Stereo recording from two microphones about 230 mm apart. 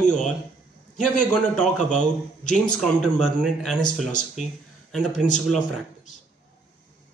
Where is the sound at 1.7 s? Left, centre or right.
Left.